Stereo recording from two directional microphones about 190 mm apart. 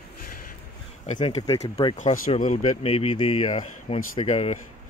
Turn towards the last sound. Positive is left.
turn(degrees=35)  # may be behind; listen again after turning